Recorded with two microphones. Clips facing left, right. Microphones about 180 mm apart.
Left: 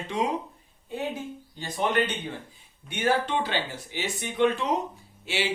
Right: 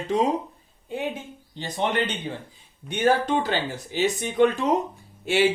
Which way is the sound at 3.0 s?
45° right (ahead or behind).